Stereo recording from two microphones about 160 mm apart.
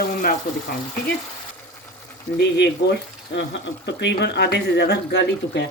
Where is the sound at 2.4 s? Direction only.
90° left.